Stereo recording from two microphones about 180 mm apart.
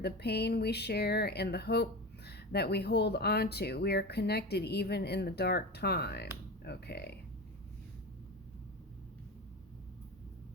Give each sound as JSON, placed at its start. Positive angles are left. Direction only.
{"t": 0.0, "sound": "speech", "side_deg": 65}